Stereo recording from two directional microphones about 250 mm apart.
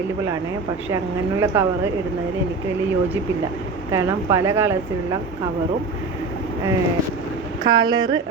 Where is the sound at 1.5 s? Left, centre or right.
Centre.